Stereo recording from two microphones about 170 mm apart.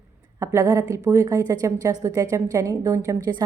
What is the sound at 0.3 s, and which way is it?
A woman's voice, 15° right (ahead or behind).